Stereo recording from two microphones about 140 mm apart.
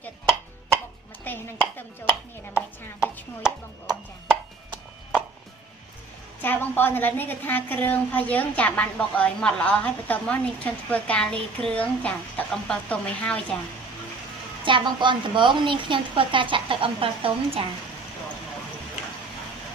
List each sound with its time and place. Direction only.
1.2 s chopping: 15° left (ahead or behind)
6.4 s a woman's voice: 15° left (ahead or behind)
14.6 s a woman's voice: 35° right (ahead or behind)